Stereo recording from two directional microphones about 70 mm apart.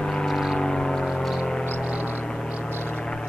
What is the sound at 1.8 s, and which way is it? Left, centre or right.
Vehicle, centre.